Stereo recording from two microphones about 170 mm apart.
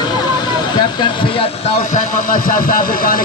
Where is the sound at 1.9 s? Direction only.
55° left (ahead or behind).